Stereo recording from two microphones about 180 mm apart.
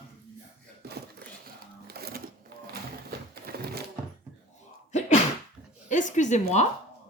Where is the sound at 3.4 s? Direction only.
60° right (ahead or behind).